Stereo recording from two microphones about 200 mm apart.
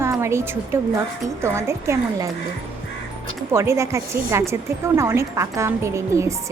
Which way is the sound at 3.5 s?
15° right (ahead or behind).